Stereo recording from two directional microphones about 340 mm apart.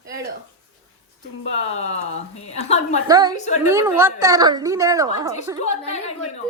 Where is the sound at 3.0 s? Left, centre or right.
Centre.